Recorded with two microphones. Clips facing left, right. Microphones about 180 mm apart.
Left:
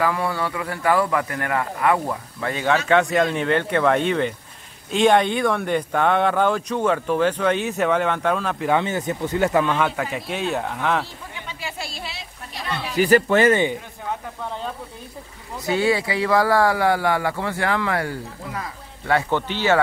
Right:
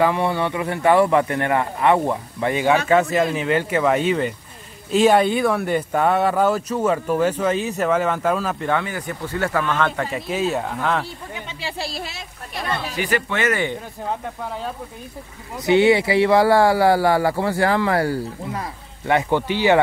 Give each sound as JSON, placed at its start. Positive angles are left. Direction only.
{"t": 0.0, "sound": "speech", "side_deg": -25}
{"t": 2.9, "sound": "speech", "side_deg": -5}
{"t": 8.6, "sound": "speech", "side_deg": 20}
{"t": 11.4, "sound": "a sound", "side_deg": -30}
{"t": 12.9, "sound": "speech", "side_deg": 40}
{"t": 15.6, "sound": "speech", "side_deg": -20}